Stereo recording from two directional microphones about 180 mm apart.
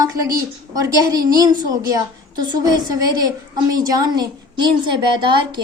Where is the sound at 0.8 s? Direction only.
20° right (ahead or behind).